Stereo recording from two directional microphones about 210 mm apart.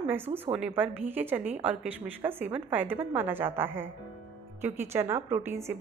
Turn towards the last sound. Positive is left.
turn(degrees=-15)  # may be behind; listen again after turning